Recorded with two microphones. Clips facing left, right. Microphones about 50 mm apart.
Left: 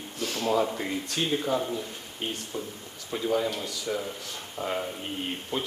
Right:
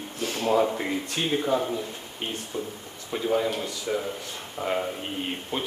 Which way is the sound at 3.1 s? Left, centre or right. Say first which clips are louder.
Right 2 dB; right.